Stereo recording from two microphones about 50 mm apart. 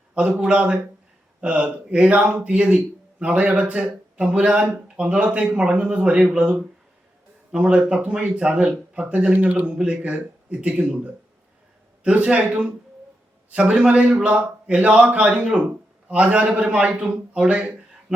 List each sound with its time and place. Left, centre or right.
0.1 s speech: right